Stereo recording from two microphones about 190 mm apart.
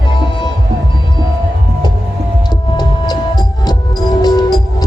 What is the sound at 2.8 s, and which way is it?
Music, 20° left (ahead or behind).